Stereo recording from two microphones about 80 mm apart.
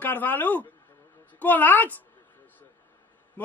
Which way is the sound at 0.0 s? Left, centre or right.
Left.